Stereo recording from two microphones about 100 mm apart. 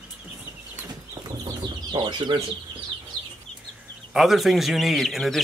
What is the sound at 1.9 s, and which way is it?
Speech, 50° right (ahead or behind).